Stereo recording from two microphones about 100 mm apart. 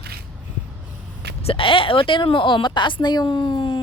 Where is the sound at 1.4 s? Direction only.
70° left (ahead or behind).